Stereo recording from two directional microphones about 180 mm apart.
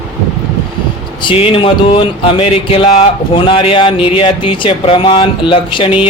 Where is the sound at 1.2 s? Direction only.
30° left (ahead or behind).